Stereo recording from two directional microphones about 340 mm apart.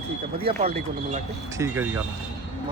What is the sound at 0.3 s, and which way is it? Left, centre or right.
Speech, centre.